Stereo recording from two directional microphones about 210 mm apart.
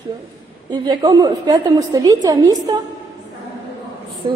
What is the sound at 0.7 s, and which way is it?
A woman's voice, 20° right (ahead or behind).